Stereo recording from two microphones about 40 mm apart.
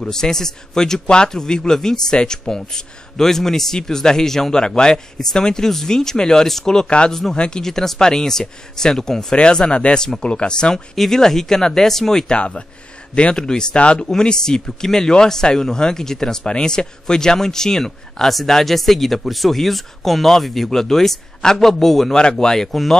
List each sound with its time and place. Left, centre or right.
0.0 s speech: centre
7.3 s speech: left
7.6 s speech: centre
9.7 s speech: left
12.4 s speech: left; by 22.9 s centre